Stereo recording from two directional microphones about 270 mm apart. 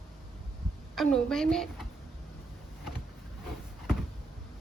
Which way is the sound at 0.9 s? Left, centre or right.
Centre.